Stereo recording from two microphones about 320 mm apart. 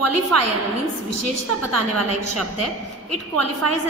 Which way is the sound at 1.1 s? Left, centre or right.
Right.